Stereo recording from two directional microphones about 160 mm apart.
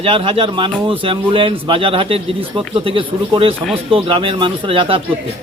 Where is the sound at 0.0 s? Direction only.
35° right (ahead or behind).